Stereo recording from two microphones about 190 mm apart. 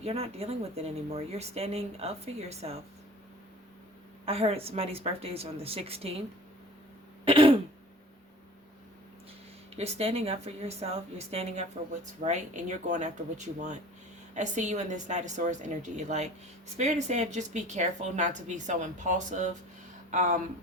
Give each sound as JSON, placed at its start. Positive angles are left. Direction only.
{"t": 0.0, "sound": "speech", "side_deg": -30}
{"t": 4.3, "sound": "speech", "side_deg": -30}
{"t": 7.3, "sound": "throat clearing", "side_deg": -30}
{"t": 9.7, "sound": "speech", "side_deg": -35}